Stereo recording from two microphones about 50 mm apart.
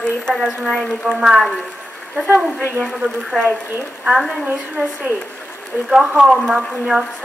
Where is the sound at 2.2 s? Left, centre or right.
Right.